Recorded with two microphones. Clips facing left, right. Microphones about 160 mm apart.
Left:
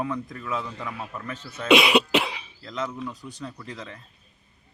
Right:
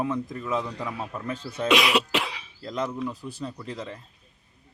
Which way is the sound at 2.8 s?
10° right (ahead or behind).